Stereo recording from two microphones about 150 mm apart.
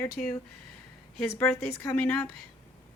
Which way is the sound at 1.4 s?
15° left (ahead or behind).